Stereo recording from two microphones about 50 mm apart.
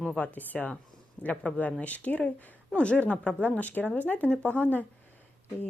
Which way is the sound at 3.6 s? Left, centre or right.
Left.